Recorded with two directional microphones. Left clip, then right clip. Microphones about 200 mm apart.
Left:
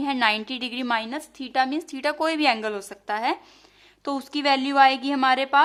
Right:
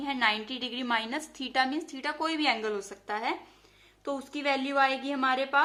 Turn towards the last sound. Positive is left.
turn(degrees=45)  # may be behind; listen again after turning